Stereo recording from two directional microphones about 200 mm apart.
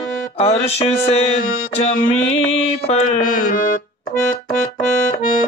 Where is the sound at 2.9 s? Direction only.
40° left (ahead or behind).